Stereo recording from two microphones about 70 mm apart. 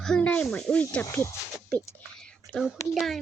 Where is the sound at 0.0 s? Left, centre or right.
Centre.